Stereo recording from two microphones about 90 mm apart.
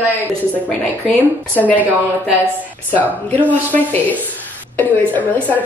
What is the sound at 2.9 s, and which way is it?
Speech, 20° left (ahead or behind).